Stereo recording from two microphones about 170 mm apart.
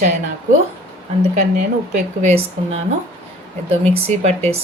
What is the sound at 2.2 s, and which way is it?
Speech, 35° right (ahead or behind).